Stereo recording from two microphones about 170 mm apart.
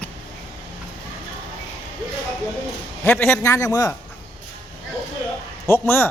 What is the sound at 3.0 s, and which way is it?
Speech, 15° left (ahead or behind).